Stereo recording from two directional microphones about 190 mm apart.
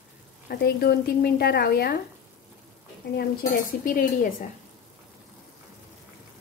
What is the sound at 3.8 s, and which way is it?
Speech, 45° left (ahead or behind).